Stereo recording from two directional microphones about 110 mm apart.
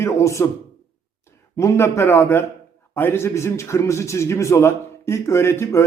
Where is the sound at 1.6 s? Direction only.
25° left (ahead or behind).